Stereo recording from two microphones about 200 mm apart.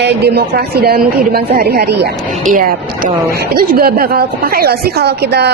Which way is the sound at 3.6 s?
50° right (ahead or behind).